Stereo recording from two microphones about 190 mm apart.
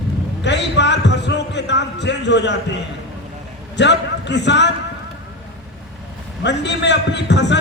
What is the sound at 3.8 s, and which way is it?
Speech, 65° left (ahead or behind).